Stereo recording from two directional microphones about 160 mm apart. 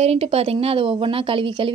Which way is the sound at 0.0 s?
40° right (ahead or behind).